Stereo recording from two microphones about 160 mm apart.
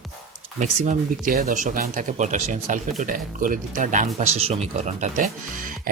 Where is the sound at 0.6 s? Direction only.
50° right (ahead or behind).